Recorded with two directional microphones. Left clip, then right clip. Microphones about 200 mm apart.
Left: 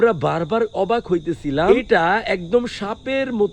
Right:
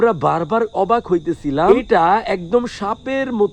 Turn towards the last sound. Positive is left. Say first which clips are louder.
# right 2 dB
turn(degrees=-25)  # may be behind; listen again after turning